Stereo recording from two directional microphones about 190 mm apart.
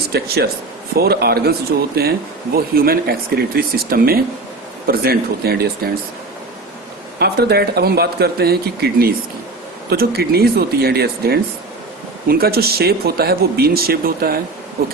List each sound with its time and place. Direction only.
0.1 s speech: 55° right (ahead or behind)
7.2 s speech: 60° right (ahead or behind)